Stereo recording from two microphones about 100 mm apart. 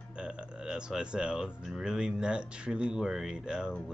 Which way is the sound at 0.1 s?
10° right (ahead or behind).